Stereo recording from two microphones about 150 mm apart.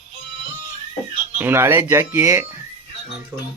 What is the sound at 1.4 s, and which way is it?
Speech, 15° right (ahead or behind).